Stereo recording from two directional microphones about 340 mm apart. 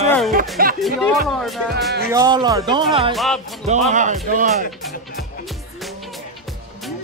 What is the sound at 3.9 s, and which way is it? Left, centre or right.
Speech, right.